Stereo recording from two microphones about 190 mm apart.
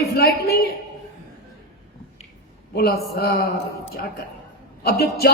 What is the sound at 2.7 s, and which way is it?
A man's voice, 55° left (ahead or behind).